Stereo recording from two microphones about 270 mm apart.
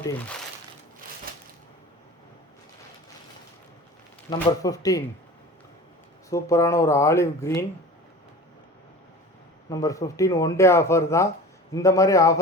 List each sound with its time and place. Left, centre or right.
1.3 s a sound: right
4.3 s speech: centre
6.3 s speech: centre
9.6 s speech: centre